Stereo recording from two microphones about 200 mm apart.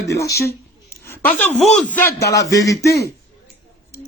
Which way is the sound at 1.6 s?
5° left (ahead or behind).